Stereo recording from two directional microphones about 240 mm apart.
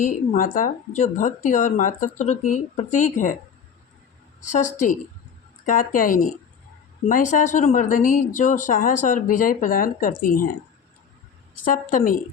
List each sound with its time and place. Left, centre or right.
0.0 s speech: left
4.4 s speech: left
11.5 s speech: left